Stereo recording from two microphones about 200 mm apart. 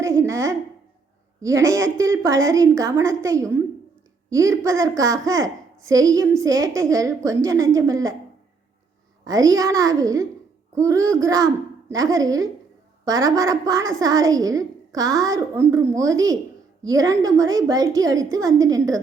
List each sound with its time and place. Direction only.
0.0 s a woman's voice: 15° right (ahead or behind)
9.2 s a woman's voice: 20° right (ahead or behind)